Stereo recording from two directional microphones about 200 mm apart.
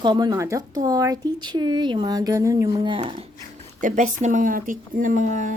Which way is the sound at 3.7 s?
40° right (ahead or behind).